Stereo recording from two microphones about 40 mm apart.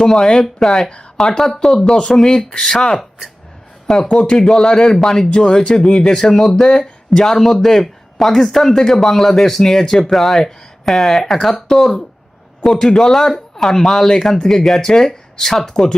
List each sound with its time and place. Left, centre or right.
0.0 s speech: centre
0.9 s speech: left